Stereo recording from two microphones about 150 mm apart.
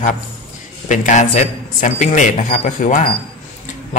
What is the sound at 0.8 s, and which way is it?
A man's voice, 55° left (ahead or behind).